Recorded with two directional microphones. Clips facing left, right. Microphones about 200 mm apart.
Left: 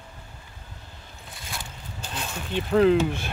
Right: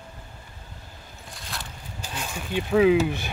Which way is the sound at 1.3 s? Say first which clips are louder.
Even; centre (ahead or behind).